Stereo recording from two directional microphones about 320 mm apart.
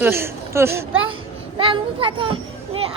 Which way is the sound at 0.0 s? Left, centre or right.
Centre.